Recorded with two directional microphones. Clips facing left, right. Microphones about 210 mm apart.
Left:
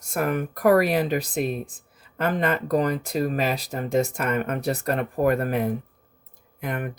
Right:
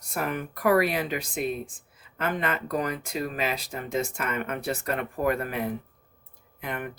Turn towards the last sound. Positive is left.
turn(degrees=45)  # may be behind; listen again after turning